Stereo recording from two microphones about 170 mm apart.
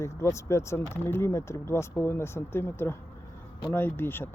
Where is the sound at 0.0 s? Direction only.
15° left (ahead or behind).